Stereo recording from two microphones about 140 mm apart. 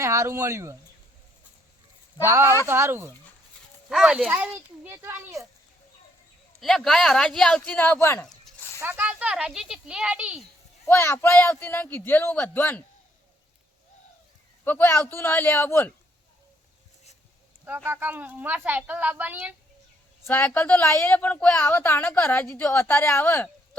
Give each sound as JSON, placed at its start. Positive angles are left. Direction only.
{"t": 0.0, "sound": "speech", "side_deg": -20}
{"t": 2.2, "sound": "a woman's voice", "side_deg": -20}
{"t": 3.8, "sound": "a woman's voice", "side_deg": -5}
{"t": 6.6, "sound": "speech", "side_deg": 0}
{"t": 8.3, "sound": "a sound", "side_deg": 5}
{"t": 8.8, "sound": "a woman's voice", "side_deg": -15}
{"t": 10.8, "sound": "a woman's voice", "side_deg": 15}
{"t": 14.6, "sound": "a woman's voice", "side_deg": 15}
{"t": 17.8, "sound": "a woman's voice", "side_deg": -15}
{"t": 20.2, "sound": "a woman's voice", "side_deg": 15}